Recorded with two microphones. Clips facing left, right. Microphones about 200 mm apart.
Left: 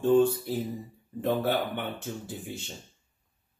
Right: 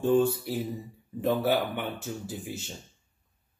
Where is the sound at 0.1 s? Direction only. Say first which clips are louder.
Left 2 dB; 10° right (ahead or behind).